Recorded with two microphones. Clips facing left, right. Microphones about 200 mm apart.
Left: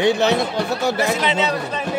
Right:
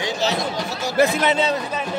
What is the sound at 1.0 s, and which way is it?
Speech, 50° right (ahead or behind).